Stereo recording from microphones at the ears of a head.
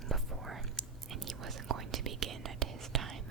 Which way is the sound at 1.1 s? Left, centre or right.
Right.